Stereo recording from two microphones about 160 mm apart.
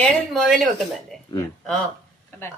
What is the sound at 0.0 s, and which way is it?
Speech, 5° left (ahead or behind).